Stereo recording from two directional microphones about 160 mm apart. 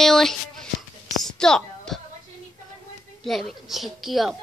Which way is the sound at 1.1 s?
5° left (ahead or behind).